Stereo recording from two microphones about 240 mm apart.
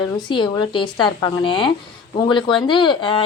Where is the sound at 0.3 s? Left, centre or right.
Centre.